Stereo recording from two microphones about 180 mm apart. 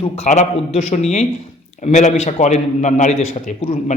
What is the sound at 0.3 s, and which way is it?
Speech, 40° left (ahead or behind).